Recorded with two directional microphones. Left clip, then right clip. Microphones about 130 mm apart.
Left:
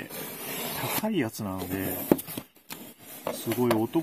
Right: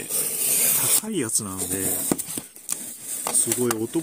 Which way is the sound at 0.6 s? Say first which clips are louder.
Right 3 dB; 5° right (ahead or behind).